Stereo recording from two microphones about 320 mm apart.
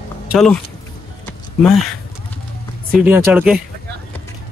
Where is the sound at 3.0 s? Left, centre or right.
Centre.